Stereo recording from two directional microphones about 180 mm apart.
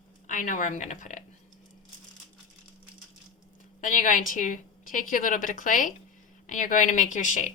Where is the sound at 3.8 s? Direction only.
45° left (ahead or behind).